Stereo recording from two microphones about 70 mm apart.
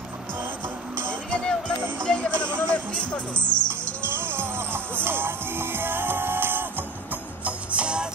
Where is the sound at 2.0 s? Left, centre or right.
Centre.